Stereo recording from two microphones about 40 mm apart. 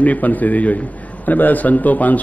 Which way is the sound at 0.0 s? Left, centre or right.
Left.